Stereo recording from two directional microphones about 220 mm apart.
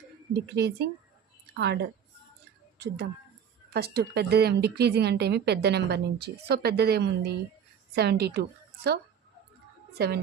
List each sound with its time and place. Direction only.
0.3 s a woman's voice: 50° right (ahead or behind)